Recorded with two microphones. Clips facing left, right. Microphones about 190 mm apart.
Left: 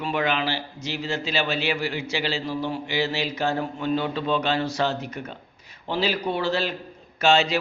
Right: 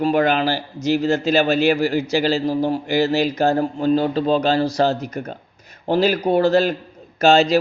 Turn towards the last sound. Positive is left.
turn(degrees=-40)  # may be behind; listen again after turning